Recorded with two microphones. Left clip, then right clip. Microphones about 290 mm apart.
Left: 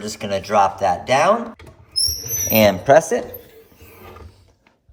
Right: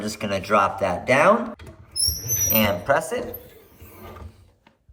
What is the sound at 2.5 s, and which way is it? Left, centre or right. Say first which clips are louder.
Speech: left 9 dB; centre.